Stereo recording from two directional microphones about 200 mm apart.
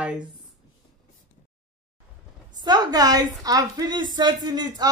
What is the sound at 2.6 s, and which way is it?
Speech, 20° right (ahead or behind).